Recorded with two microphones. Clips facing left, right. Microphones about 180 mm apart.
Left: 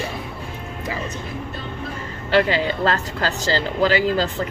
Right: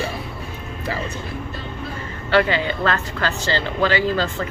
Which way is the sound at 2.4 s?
35° left (ahead or behind).